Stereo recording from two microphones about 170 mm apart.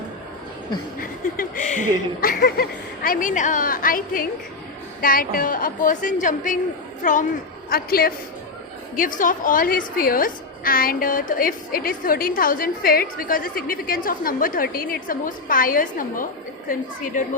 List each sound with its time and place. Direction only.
0.9 s a woman's voice: 55° left (ahead or behind)
7.7 s a woman's voice: 60° left (ahead or behind)